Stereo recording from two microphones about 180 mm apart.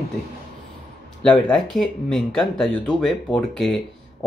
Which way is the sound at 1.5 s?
Centre (ahead or behind).